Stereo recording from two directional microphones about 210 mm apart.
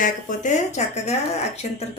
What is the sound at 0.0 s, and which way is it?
Speech, 40° left (ahead or behind).